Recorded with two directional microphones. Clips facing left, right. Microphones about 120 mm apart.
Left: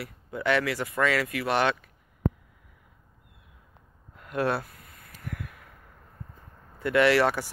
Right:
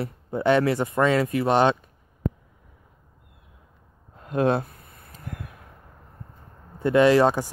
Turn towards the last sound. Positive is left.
turn(degrees=-20)  # may be behind; listen again after turning